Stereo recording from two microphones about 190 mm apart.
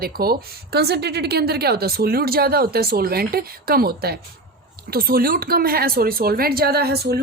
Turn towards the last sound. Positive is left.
turn(degrees=-55)  # may be behind; listen again after turning